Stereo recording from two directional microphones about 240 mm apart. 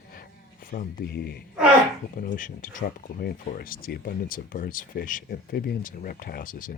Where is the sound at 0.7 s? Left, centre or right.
Left.